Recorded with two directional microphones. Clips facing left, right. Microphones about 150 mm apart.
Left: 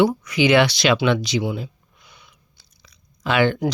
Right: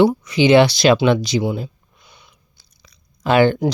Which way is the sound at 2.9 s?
40° right (ahead or behind).